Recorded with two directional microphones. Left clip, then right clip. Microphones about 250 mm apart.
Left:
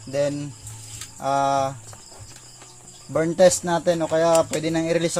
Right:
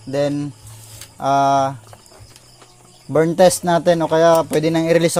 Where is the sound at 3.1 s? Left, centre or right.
Right.